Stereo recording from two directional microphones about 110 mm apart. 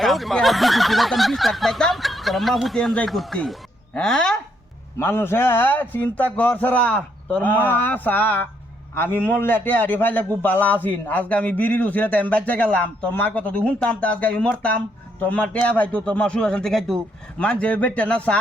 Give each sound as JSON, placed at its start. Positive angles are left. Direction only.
{"t": 0.0, "sound": "speech", "side_deg": 0}
{"t": 4.9, "sound": "a man's voice", "side_deg": 20}